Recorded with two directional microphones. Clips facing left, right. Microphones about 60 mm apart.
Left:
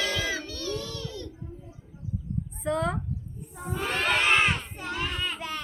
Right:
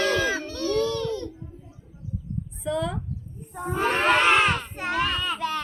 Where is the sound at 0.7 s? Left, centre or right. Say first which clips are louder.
Right 15 dB; right.